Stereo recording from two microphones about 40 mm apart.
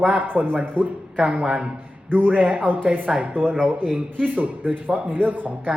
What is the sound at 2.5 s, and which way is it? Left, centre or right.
Speech, right.